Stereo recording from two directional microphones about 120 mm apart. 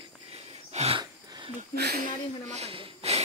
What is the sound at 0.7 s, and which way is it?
Wheeze, 70° right (ahead or behind).